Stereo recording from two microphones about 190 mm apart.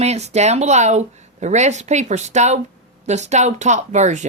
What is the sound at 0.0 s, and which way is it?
Speech, 35° right (ahead or behind).